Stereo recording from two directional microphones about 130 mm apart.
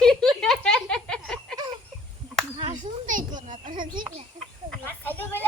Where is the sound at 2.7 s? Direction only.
85° right.